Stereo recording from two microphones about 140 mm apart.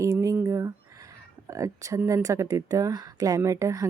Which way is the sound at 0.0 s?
20° right (ahead or behind).